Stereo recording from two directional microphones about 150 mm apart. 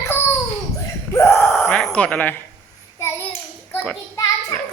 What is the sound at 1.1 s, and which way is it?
Speech, 20° left (ahead or behind).